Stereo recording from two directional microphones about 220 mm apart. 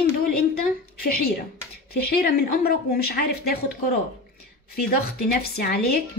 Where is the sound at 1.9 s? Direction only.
45° left (ahead or behind).